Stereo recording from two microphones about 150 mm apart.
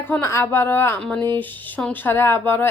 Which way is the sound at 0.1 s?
15° left (ahead or behind).